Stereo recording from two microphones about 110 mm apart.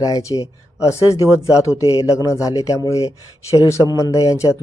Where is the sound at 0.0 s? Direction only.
30° left (ahead or behind).